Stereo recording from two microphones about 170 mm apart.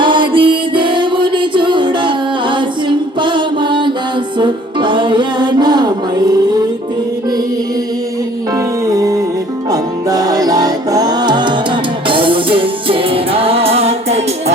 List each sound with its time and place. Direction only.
0.0 s music: 30° right (ahead or behind)
3.2 s mantra: 30° right (ahead or behind)
4.4 s music: 30° right (ahead or behind)
8.5 s music: 20° right (ahead or behind); by 14.5 s 35° right (ahead or behind)